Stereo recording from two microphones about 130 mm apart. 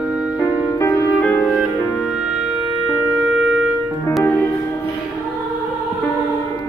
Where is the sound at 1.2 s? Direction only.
10° left (ahead or behind).